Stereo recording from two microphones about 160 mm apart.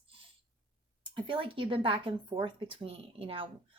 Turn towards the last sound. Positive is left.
turn(degrees=-35)  # may be behind; listen again after turning